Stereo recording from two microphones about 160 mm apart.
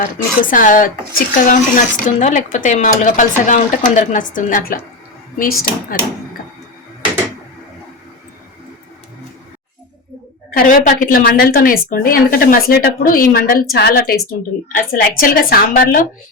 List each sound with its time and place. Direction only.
0.0 s a woman's voice: 55° left (ahead or behind)
10.5 s a woman's voice: 60° left (ahead or behind); by 14.2 s 85° left
14.7 s a woman's voice: 60° left (ahead or behind)